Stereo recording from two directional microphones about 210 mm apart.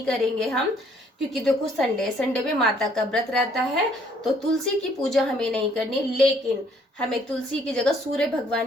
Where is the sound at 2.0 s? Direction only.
5° left (ahead or behind).